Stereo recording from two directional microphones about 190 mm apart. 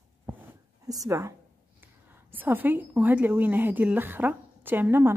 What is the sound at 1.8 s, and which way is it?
A woman's voice, 10° right (ahead or behind).